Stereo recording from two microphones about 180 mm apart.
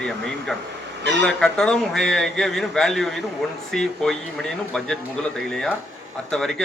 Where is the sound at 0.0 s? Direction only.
5° left (ahead or behind).